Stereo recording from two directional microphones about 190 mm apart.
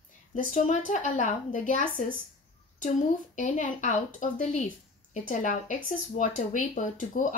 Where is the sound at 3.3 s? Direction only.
40° left (ahead or behind).